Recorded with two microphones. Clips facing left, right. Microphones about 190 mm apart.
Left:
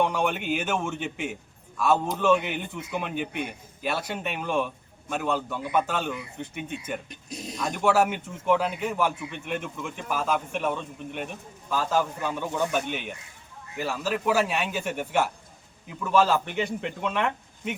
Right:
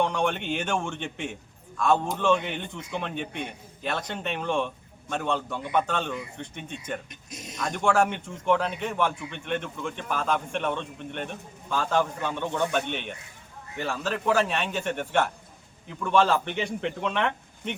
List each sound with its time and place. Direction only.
0.0 s a man's voice: 5° left (ahead or behind)
7.1 s speech: 35° left (ahead or behind)
7.6 s a man's voice: 5° left (ahead or behind)